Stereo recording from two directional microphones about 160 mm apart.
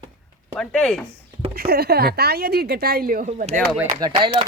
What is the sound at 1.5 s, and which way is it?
A woman's voice, 80° right.